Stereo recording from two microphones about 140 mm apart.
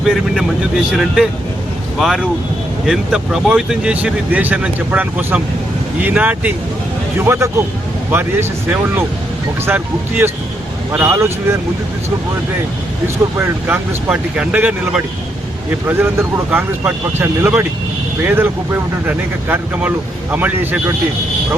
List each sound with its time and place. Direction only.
0.0 s speech: 5° right (ahead or behind); by 11.6 s 20° right (ahead or behind)
13.3 s speech: 15° right (ahead or behind)